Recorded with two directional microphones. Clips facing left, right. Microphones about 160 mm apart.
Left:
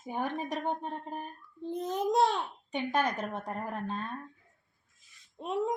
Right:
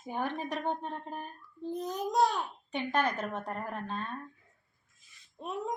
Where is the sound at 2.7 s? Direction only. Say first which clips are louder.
Even; 15° left (ahead or behind).